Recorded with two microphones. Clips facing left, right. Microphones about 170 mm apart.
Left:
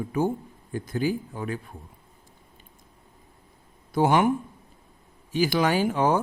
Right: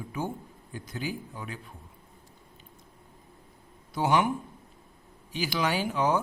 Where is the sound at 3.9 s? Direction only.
50° left (ahead or behind).